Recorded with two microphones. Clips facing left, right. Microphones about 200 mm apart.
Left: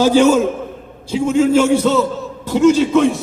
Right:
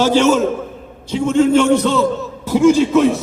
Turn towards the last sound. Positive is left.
turn(degrees=-5)  # may be behind; listen again after turning